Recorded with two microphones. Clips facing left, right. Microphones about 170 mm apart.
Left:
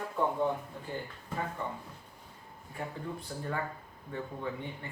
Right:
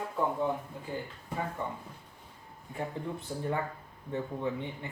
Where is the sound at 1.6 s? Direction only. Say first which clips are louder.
Right 1 dB; 15° right (ahead or behind).